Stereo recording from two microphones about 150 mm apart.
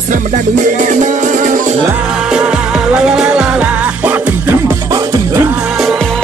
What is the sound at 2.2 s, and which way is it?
Music, 5° right (ahead or behind).